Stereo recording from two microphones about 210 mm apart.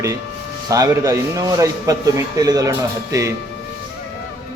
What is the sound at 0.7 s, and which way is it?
A man's voice, 15° right (ahead or behind).